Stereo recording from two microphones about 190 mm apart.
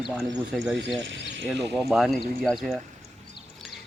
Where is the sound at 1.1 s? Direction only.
70° right (ahead or behind).